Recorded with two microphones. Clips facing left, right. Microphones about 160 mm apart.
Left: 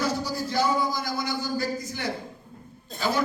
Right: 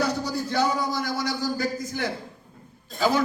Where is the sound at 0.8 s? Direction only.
75° right (ahead or behind).